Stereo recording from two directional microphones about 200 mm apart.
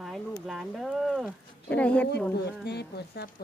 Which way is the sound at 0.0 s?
Centre (ahead or behind).